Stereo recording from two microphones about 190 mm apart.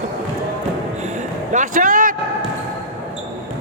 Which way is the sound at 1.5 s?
40° right (ahead or behind).